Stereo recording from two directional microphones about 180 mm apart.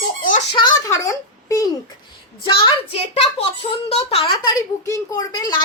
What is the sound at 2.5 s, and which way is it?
A woman's voice, 30° left (ahead or behind).